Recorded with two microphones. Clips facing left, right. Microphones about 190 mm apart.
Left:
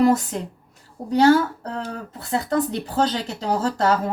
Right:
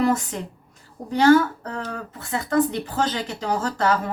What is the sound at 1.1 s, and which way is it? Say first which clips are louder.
Speech: even; 35° left (ahead or behind).